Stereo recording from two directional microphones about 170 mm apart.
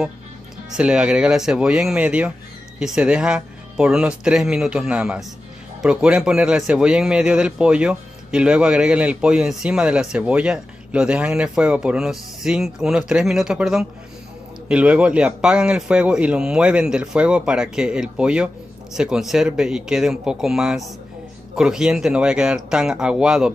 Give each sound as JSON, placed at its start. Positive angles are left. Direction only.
{"t": 0.7, "sound": "a man's voice", "side_deg": -5}